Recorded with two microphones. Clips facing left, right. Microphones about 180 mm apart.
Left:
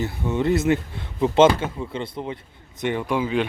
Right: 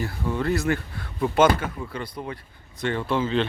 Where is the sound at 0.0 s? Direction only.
20° left (ahead or behind).